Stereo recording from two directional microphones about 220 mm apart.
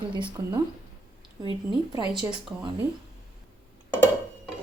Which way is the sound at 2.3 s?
20° right (ahead or behind).